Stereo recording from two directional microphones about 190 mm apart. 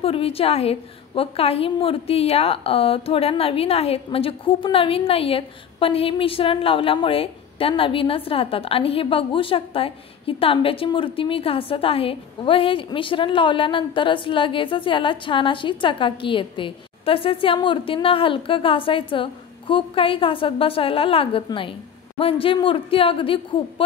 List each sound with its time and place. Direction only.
0.0 s a woman's voice: 30° left (ahead or behind)